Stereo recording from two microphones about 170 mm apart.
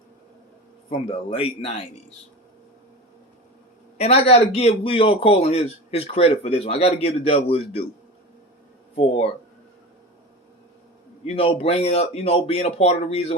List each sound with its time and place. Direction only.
0.9 s a man's voice: 35° left (ahead or behind)
3.9 s a man's voice: 40° left (ahead or behind)
9.0 s a man's voice: 35° left (ahead or behind)
11.3 s a man's voice: 35° left (ahead or behind)